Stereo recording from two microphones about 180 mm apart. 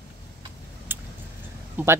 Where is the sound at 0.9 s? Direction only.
10° right (ahead or behind).